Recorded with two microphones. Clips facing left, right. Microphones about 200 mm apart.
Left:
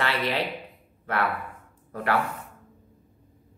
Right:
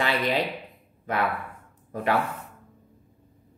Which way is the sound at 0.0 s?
15° right (ahead or behind).